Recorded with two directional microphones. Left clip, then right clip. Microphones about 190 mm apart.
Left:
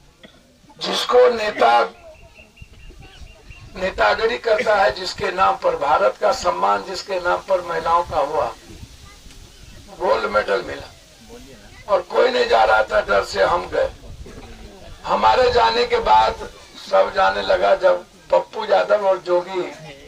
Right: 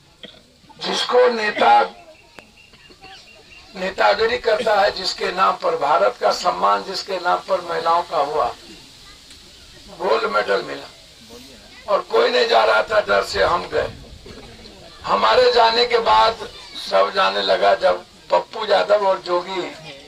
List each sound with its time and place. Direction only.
0.8 s speech: 40° left (ahead or behind)
3.8 s a man's voice: 50° left (ahead or behind)
10.0 s a man's voice: 50° left (ahead or behind)
11.9 s a man's voice: 50° left (ahead or behind)
15.0 s a man's voice: 45° left (ahead or behind)